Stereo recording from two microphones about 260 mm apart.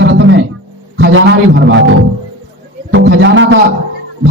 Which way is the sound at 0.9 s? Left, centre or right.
Right.